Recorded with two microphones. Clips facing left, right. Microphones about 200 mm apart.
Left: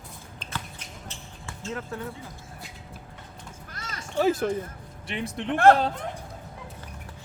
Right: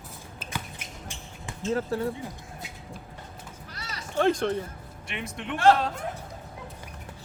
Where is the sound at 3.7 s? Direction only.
50° left (ahead or behind).